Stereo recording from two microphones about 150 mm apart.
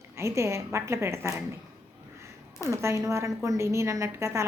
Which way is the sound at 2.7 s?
20° right (ahead or behind).